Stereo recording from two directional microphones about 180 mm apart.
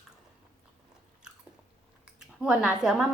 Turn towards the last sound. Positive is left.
turn(degrees=-5)  # may be behind; listen again after turning